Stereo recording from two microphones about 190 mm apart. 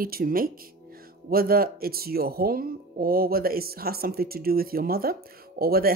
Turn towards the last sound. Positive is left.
turn(degrees=-50)  # may be behind; listen again after turning